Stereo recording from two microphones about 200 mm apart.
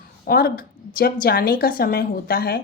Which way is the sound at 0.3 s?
50° left (ahead or behind).